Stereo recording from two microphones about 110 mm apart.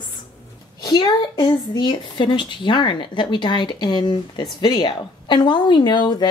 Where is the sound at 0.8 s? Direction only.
40° left (ahead or behind).